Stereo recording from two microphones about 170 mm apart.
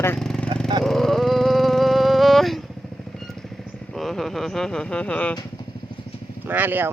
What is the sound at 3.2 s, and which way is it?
Vehicle, centre (ahead or behind).